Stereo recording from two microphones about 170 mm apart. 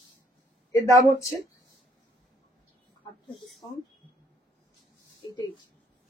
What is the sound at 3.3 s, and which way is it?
Speech, centre (ahead or behind).